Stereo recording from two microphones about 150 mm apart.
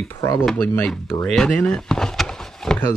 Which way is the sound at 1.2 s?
5° left (ahead or behind).